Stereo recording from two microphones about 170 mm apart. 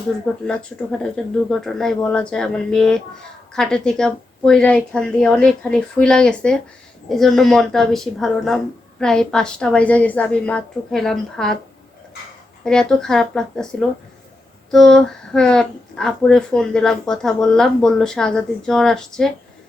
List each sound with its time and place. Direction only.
0.4 s speech: 5° left (ahead or behind)
12.6 s speech: 5° left (ahead or behind)